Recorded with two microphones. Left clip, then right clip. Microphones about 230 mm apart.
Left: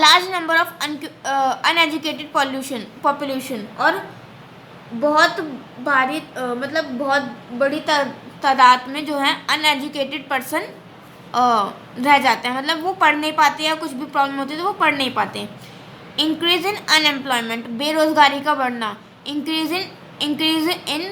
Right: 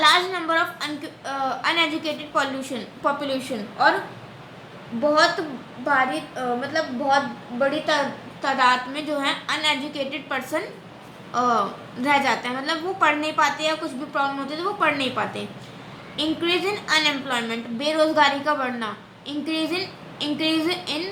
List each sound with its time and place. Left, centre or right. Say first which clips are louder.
0.0 s a sound: left 4 dB; left
5.8 s a woman's voice: left 3 dB; centre
7.6 s a woman's voice: left 3 dB; left